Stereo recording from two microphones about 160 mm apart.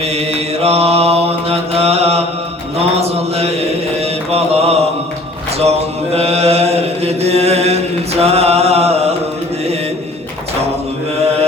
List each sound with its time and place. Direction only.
0.0 s mantra: 40° right (ahead or behind)
5.5 s chant: 40° right (ahead or behind)
8.2 s mantra: 40° right (ahead or behind)